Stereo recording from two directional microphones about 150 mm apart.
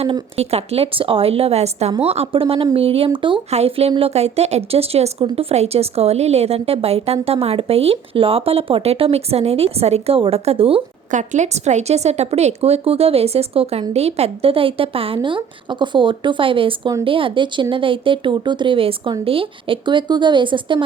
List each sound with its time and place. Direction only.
0.0 s a woman's voice: 40° right (ahead or behind)
11.1 s a woman's voice: 55° right (ahead or behind); by 20.8 s 35° right (ahead or behind)